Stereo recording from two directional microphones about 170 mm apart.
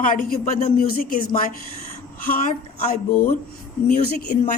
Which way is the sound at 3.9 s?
50° left (ahead or behind).